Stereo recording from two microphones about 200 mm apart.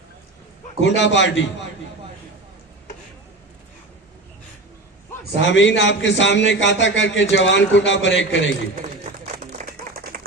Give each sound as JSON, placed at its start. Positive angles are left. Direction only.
{"t": 0.9, "sound": "a man's voice", "side_deg": 65}
{"t": 5.4, "sound": "a man's voice", "side_deg": 65}
{"t": 9.5, "sound": "clapping", "side_deg": -50}